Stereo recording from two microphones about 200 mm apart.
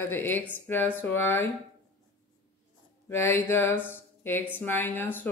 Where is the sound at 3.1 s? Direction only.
10° left (ahead or behind).